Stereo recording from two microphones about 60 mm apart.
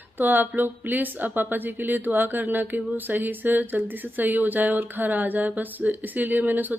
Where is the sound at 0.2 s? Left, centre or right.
Right.